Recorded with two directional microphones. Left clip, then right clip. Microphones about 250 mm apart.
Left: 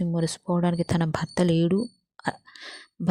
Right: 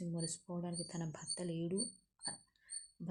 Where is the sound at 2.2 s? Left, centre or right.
Left.